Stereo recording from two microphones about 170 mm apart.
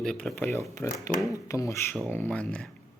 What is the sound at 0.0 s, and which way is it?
Speech, 5° left (ahead or behind).